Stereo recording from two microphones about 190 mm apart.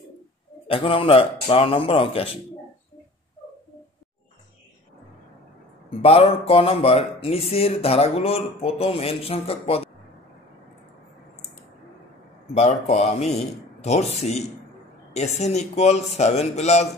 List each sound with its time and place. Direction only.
0.7 s speech: 30° left (ahead or behind)
5.9 s a man's voice: 30° left (ahead or behind)
12.5 s speech: 35° left (ahead or behind)